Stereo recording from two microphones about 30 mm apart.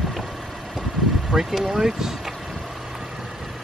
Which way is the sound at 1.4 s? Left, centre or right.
Centre.